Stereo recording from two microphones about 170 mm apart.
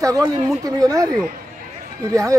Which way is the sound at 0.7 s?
20° right (ahead or behind).